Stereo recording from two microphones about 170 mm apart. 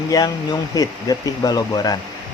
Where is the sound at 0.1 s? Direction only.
20° left (ahead or behind).